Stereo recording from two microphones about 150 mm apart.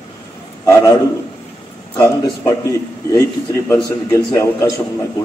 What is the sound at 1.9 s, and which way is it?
Speech, 20° left (ahead or behind).